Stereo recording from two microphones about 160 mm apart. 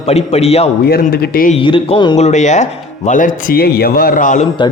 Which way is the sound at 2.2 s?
45° left (ahead or behind).